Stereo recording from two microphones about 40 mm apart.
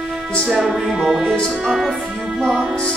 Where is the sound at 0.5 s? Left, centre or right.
Centre.